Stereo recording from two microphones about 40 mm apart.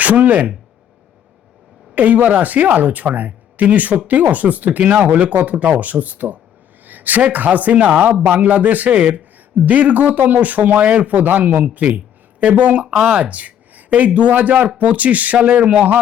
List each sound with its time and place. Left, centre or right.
0.0 s speech: right
2.0 s speech: right
13.0 s speech: right